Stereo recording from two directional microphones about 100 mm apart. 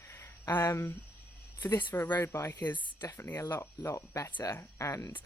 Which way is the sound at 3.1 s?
25° left (ahead or behind).